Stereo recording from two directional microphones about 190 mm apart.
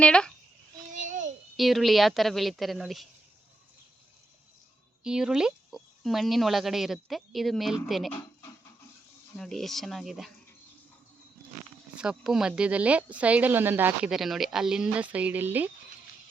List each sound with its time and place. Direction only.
0.0 s speech: 5° left (ahead or behind)
1.0 s child singing: 40° right (ahead or behind)
1.5 s speech: centre (ahead or behind)
5.0 s speech: 5° right (ahead or behind)
9.3 s speech: centre (ahead or behind)
11.9 s speech: 5° right (ahead or behind)